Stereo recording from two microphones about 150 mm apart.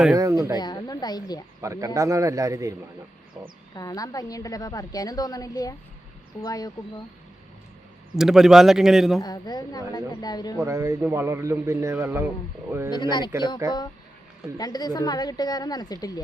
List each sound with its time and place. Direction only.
0.2 s a man's voice: 20° right (ahead or behind)
0.6 s a woman's voice: 25° left (ahead or behind)
1.6 s a man's voice: 20° right (ahead or behind)
3.8 s a woman's voice: 25° left (ahead or behind)
8.1 s a man's voice: centre (ahead or behind)
9.2 s a woman's voice: 25° left (ahead or behind)
10.6 s a man's voice: 20° right (ahead or behind)
12.9 s a woman's voice: 30° left (ahead or behind)
13.6 s a man's voice: 20° right (ahead or behind)
14.6 s a woman's voice: 25° left (ahead or behind)